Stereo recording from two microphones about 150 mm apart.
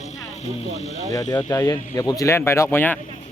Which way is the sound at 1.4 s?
20° left (ahead or behind).